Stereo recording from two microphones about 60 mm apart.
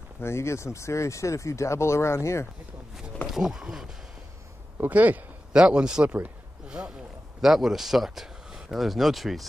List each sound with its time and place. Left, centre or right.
0.2 s speech: left
3.3 s speech: centre
4.7 s a man's voice: right
5.5 s a man's voice: centre
7.4 s speech: centre